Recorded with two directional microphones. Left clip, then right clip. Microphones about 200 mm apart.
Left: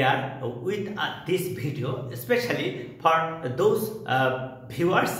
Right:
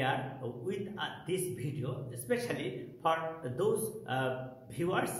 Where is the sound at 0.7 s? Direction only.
5° right (ahead or behind).